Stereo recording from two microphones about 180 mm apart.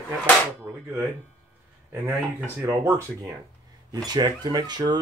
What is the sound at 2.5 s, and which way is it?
Speech, 15° right (ahead or behind).